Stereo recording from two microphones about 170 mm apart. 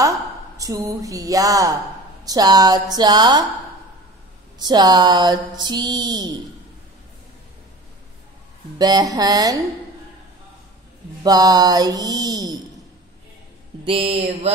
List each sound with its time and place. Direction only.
0.0 s speech: 20° right (ahead or behind)
2.2 s mantra: 20° right (ahead or behind)
4.6 s mantra: 25° right (ahead or behind)
8.7 s mantra: 25° right (ahead or behind)
11.2 s mantra: 20° right (ahead or behind)
13.8 s mantra: 35° right (ahead or behind)